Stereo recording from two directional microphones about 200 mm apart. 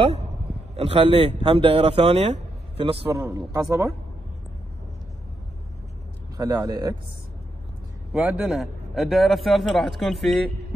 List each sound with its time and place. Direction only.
0.0 s a sound: 35° right (ahead or behind)
0.7 s speech: 30° right (ahead or behind)
3.2 s a man's voice: 15° right (ahead or behind)
6.3 s speech: 20° right (ahead or behind)
8.1 s a man's voice: centre (ahead or behind)